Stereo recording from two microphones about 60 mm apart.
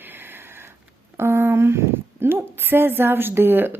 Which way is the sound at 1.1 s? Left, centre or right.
Right.